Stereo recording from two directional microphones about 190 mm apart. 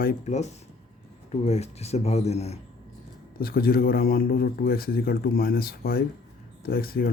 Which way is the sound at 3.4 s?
50° left (ahead or behind).